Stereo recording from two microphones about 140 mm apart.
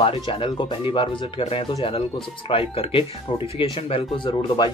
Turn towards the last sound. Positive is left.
turn(degrees=35)  # may be behind; listen again after turning